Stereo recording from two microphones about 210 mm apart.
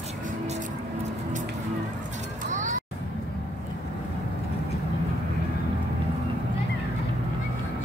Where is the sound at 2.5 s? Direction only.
35° right (ahead or behind).